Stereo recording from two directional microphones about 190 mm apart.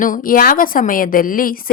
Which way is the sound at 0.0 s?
45° left (ahead or behind).